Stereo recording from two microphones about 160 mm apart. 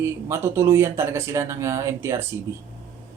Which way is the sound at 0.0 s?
15° right (ahead or behind).